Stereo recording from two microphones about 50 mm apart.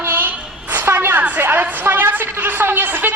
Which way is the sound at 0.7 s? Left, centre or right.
Right.